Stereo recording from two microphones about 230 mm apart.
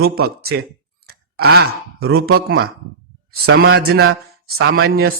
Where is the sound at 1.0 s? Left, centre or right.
Right.